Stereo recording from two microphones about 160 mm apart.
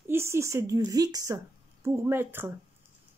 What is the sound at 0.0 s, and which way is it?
Speech, 15° right (ahead or behind).